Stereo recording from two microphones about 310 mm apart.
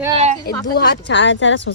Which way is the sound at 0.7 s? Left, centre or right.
Left.